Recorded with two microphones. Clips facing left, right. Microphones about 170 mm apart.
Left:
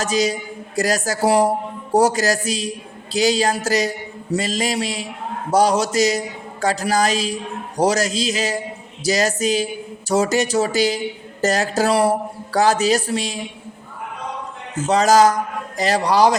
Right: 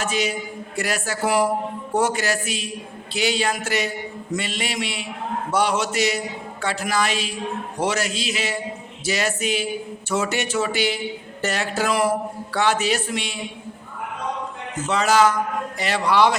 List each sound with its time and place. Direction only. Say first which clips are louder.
0.0 s a woman's voice: left 4 dB; 40° left (ahead or behind)
14.8 s a woman's voice: left 4 dB; 40° left (ahead or behind)